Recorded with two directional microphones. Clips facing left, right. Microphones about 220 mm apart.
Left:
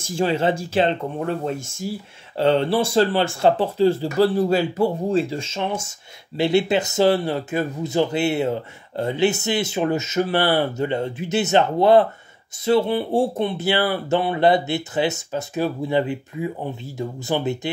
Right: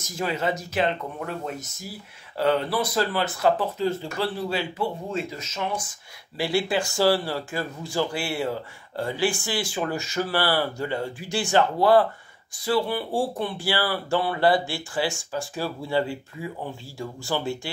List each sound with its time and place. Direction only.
0.0 s speech: 30° left (ahead or behind)